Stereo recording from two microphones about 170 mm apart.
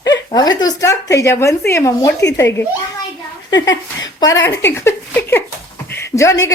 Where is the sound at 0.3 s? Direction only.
25° left (ahead or behind).